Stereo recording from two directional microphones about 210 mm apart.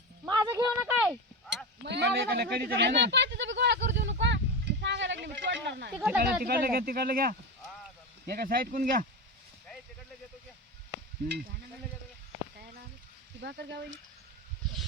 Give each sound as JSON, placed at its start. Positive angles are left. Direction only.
{"t": 0.3, "sound": "a sound", "side_deg": -15}
{"t": 1.8, "sound": "speech", "side_deg": -55}
{"t": 4.0, "sound": "a sound", "side_deg": -60}
{"t": 6.0, "sound": "speech", "side_deg": -5}
{"t": 6.4, "sound": "speech", "side_deg": -45}
{"t": 13.4, "sound": "speech", "side_deg": -55}